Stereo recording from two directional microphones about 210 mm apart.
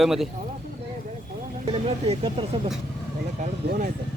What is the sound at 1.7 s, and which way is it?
Speech, 30° right (ahead or behind).